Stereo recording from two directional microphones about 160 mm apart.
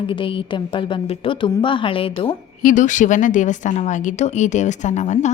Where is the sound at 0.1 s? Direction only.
35° left (ahead or behind).